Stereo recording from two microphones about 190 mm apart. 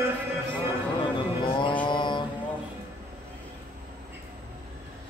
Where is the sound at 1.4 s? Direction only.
25° left (ahead or behind).